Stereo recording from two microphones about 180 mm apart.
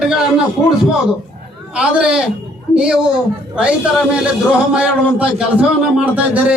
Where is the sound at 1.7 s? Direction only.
5° right (ahead or behind).